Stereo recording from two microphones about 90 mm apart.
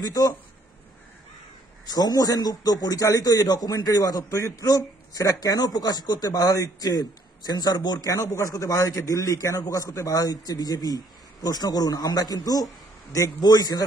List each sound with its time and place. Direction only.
0.0 s a man's voice: 45° left (ahead or behind)
1.9 s a man's voice: 45° left (ahead or behind)